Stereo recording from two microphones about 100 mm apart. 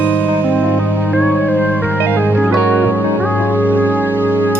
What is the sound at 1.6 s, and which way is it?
Music, 20° right (ahead or behind).